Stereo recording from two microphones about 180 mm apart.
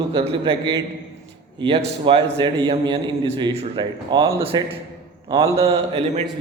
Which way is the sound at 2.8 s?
25° right (ahead or behind).